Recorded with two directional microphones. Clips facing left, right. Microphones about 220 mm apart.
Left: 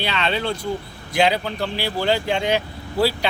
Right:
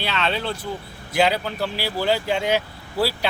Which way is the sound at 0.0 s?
Centre (ahead or behind).